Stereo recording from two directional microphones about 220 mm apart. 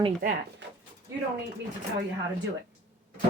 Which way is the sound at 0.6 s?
55° right (ahead or behind).